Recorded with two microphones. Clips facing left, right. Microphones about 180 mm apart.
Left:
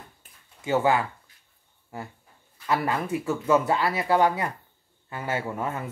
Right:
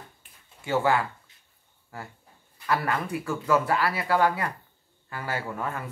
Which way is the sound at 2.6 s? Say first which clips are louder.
Left 1 dB; 20° left (ahead or behind).